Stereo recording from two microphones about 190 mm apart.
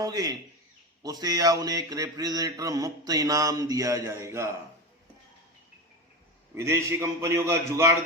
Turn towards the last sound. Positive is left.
turn(degrees=-15)  # may be behind; listen again after turning